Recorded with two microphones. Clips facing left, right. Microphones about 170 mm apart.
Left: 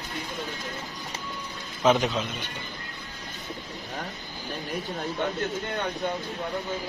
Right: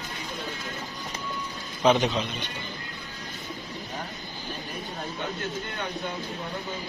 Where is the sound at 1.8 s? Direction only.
Centre (ahead or behind).